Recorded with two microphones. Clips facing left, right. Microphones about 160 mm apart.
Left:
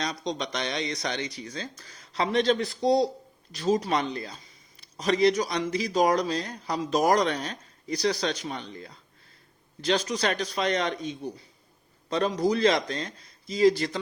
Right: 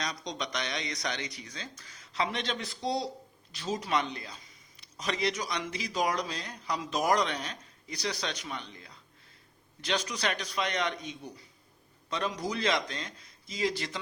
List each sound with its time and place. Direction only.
0.0 s speech: 30° left (ahead or behind)